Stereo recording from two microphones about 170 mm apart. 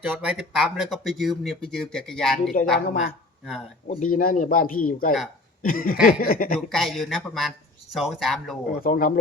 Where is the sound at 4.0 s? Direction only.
55° left (ahead or behind).